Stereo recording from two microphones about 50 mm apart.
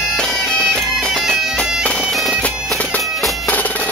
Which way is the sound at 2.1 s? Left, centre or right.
Centre.